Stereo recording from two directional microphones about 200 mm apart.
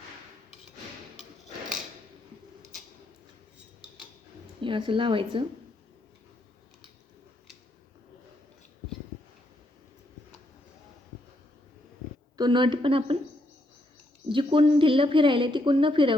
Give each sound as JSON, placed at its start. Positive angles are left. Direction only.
{"t": 4.6, "sound": "a woman's voice", "side_deg": -25}
{"t": 12.4, "sound": "a woman's voice", "side_deg": -25}
{"t": 14.3, "sound": "a woman's voice", "side_deg": -25}